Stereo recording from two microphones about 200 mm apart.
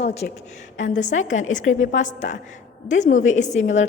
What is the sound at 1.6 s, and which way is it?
Speech, 80° left.